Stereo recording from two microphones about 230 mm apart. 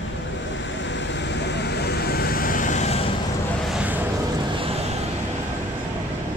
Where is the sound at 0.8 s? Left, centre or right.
Left.